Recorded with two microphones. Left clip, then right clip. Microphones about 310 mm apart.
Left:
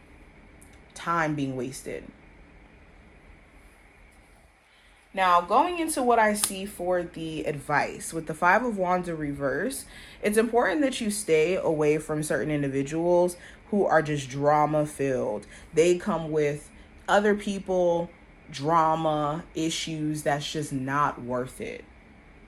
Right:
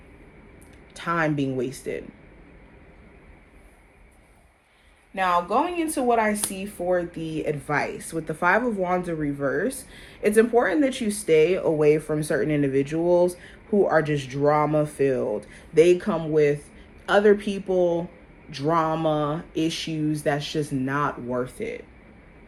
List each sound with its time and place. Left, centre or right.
1.0 s speech: centre
5.1 s speech: left